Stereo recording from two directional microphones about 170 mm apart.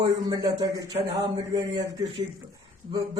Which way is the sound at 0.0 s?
25° right (ahead or behind).